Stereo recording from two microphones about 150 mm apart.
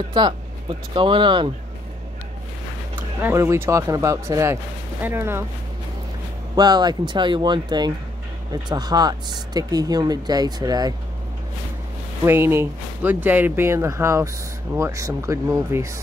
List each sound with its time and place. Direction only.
0.2 s speech: 30° right (ahead or behind)
3.0 s speech: 15° right (ahead or behind)
6.5 s speech: 25° right (ahead or behind)
12.3 s speech: 15° right (ahead or behind)